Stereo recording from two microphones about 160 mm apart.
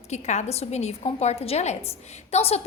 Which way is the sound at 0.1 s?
45° left (ahead or behind).